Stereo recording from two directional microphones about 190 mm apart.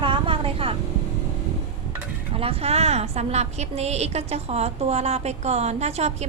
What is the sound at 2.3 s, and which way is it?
A woman's voice, 30° right (ahead or behind).